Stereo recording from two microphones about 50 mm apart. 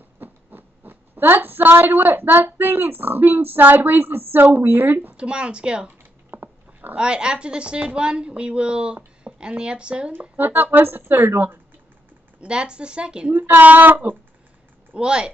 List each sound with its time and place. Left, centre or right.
0.2 s a sound: right
2.5 s speech: right
5.1 s a woman's voice: centre
6.3 s dog: right
7.0 s a woman's voice: centre
10.3 s speech: right
12.4 s a woman's voice: centre
13.3 s speech: right
15.0 s a woman's voice: centre